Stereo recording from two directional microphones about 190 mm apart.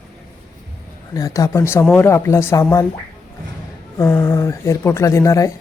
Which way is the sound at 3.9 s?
15° left (ahead or behind).